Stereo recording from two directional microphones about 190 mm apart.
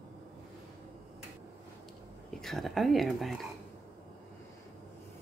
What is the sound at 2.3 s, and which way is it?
Speech, centre (ahead or behind).